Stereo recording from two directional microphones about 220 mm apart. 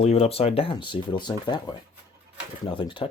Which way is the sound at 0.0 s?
30° left (ahead or behind).